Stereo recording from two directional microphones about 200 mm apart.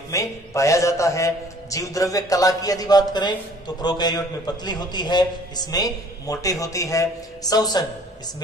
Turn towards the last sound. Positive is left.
turn(degrees=20)  # may be behind; listen again after turning